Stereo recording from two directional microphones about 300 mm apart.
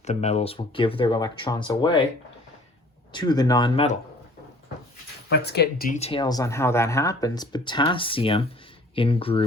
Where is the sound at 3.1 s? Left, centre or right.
Centre.